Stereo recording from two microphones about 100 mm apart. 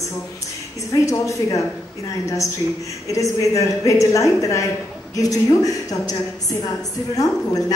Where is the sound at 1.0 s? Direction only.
30° left (ahead or behind).